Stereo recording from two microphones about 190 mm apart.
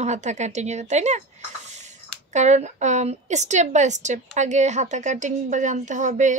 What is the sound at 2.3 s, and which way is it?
A woman's voice, 35° right (ahead or behind).